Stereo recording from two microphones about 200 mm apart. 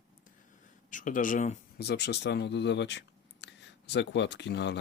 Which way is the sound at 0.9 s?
40° left (ahead or behind).